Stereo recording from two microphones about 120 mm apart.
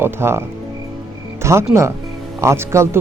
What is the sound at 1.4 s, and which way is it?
Speech, 25° right (ahead or behind).